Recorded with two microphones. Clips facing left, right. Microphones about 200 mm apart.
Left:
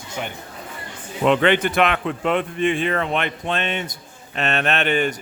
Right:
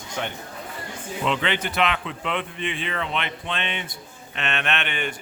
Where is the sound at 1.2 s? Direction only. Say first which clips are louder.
Left 9 dB; 55° left (ahead or behind).